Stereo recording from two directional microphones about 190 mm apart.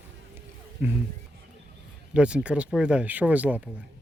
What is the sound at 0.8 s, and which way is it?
Speech, 10° right (ahead or behind).